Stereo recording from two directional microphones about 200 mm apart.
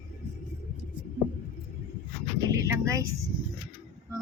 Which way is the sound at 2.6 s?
15° right (ahead or behind).